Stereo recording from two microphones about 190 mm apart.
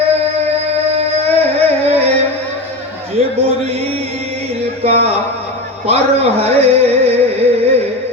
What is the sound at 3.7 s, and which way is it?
Music, 30° right (ahead or behind).